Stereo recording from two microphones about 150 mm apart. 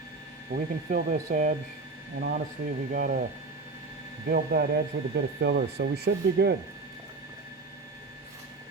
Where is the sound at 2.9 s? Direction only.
70° right (ahead or behind).